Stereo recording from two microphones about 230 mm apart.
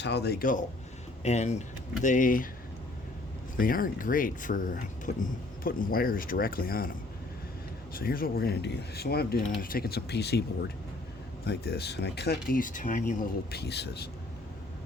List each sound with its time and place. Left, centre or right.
0.0 s speech: left
3.6 s speech: left
7.9 s speech: left